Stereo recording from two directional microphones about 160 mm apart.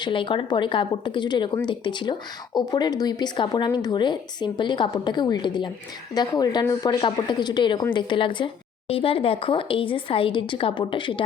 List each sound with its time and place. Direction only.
0.0 s speech: 30° left (ahead or behind)